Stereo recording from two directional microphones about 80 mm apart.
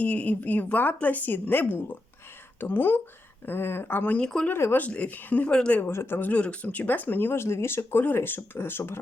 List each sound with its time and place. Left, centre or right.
0.0 s speech: centre
4.2 s speech: centre
4.4 s speech: left
4.9 s speech: centre
5.8 s speech: left